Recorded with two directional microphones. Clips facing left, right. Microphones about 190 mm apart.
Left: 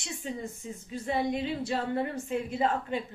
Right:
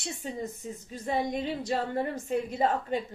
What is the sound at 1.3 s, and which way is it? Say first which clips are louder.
A woman's voice: even; 40° right (ahead or behind).